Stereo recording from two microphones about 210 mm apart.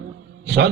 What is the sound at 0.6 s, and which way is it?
Speech, 50° right (ahead or behind).